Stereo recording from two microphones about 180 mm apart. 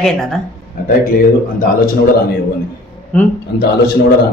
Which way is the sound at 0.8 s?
50° left (ahead or behind).